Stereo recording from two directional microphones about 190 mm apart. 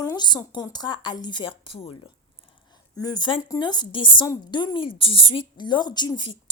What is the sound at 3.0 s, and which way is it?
A woman's voice, 25° left (ahead or behind).